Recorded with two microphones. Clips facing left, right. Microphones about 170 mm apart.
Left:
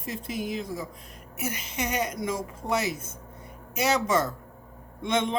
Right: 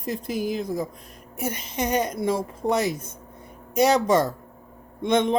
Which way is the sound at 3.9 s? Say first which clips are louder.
Right 1 dB; 35° right (ahead or behind).